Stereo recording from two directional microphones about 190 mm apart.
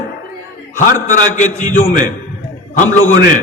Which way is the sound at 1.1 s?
40° left (ahead or behind).